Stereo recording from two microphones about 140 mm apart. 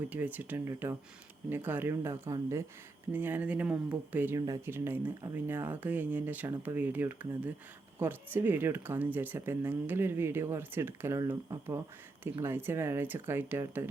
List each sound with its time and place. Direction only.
0.1 s speech: 10° right (ahead or behind)
4.4 s speech: 25° right (ahead or behind)
4.7 s speech: 15° right (ahead or behind)